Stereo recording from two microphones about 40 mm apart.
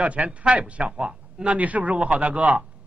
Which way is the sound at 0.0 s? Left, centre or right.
Right.